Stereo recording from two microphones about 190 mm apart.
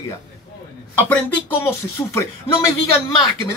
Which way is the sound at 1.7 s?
15° left (ahead or behind).